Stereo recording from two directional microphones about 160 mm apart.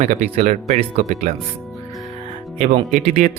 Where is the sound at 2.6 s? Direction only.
40° right (ahead or behind).